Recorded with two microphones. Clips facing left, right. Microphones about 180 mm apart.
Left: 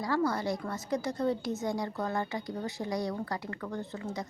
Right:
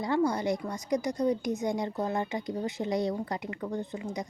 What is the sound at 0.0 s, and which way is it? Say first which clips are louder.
A woman's voice: right 3 dB; 20° right (ahead or behind).